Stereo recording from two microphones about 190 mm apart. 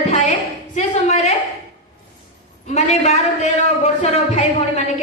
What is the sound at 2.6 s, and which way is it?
A woman's voice, 35° left (ahead or behind).